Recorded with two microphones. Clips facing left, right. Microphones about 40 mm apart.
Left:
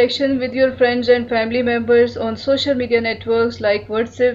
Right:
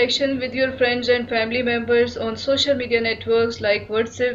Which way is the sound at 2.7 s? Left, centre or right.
Centre.